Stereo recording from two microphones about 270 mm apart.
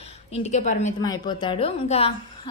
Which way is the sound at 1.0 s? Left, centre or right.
Centre.